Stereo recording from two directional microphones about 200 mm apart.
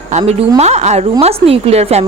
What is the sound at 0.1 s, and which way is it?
A woman's voice, 35° right (ahead or behind).